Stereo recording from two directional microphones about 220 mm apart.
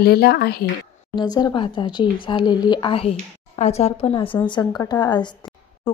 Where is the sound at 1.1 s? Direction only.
20° left (ahead or behind).